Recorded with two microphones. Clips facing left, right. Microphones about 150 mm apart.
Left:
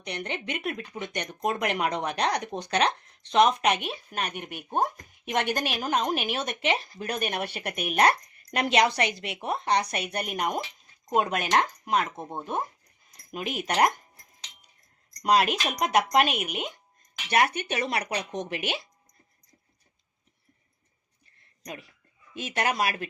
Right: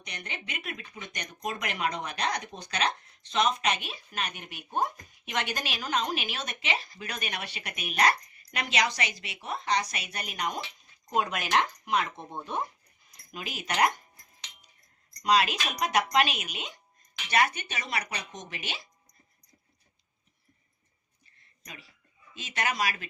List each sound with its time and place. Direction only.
0.0 s speech: 60° left (ahead or behind)
11.3 s speech: 40° left (ahead or behind)
13.3 s speech: 55° left (ahead or behind)
15.2 s speech: 55° left (ahead or behind)
21.6 s speech: 50° left (ahead or behind)